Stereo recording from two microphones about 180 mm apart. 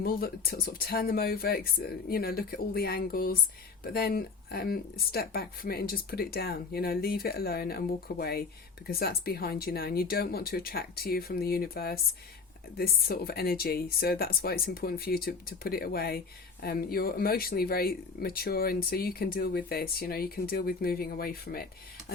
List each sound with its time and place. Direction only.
0.0 s speech: 55° left (ahead or behind)